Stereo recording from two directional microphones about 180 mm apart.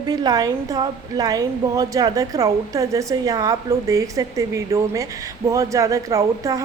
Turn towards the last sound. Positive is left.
turn(degrees=-20)  # may be behind; listen again after turning